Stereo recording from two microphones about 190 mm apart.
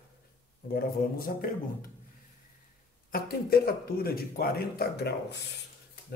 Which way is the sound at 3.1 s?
55° left (ahead or behind).